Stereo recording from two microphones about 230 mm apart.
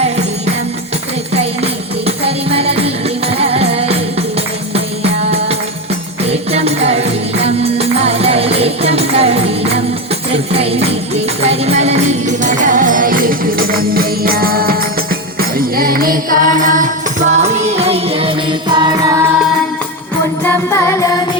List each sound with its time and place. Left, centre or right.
1.3 s music: right
6.5 s music: right
20.4 s music: centre